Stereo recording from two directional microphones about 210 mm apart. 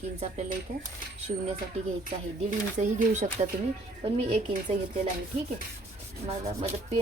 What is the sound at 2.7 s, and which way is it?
Speech, 35° right (ahead or behind).